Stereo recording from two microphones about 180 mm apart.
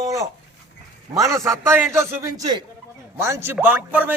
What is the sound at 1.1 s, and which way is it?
A man's voice, 15° right (ahead or behind).